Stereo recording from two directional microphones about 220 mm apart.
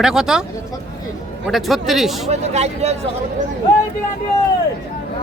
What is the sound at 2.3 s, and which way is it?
Speech, 30° right (ahead or behind).